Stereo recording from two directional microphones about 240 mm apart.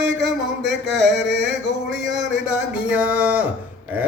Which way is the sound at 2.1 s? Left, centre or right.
Centre.